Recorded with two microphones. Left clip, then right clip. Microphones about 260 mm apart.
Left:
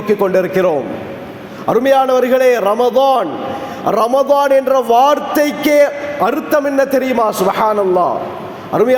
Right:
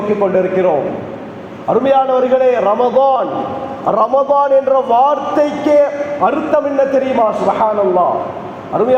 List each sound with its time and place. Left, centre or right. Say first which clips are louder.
1.7 s a man's voice: left 1 dB; left